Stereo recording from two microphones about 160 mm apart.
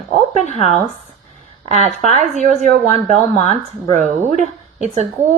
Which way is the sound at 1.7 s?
45° right (ahead or behind).